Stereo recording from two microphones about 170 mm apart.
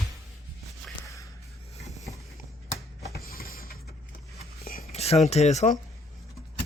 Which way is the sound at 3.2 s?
60° left (ahead or behind).